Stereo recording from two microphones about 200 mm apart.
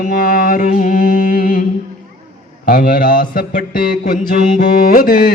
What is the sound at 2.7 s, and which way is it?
Mantra, 45° left (ahead or behind).